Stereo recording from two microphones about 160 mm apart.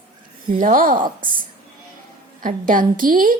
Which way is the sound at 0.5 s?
60° right (ahead or behind).